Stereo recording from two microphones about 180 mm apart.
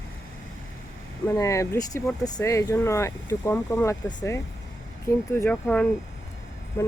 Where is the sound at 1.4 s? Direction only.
15° left (ahead or behind).